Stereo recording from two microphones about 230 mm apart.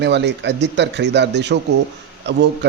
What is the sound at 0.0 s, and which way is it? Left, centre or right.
Speech, right.